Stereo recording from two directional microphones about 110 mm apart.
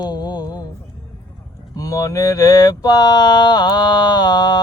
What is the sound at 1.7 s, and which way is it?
Mantra, 30° left (ahead or behind).